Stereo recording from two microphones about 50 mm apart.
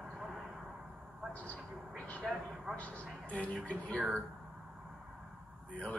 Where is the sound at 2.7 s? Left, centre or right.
Left.